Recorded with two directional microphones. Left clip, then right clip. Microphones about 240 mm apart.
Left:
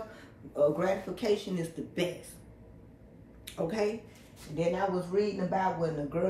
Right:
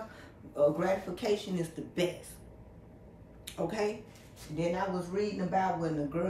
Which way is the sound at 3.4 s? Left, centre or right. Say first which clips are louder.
Left 2 dB; centre.